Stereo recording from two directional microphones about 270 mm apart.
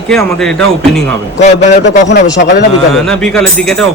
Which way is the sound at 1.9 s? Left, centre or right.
Left.